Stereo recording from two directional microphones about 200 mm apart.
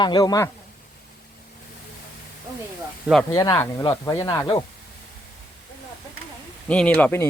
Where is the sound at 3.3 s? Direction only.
20° left (ahead or behind).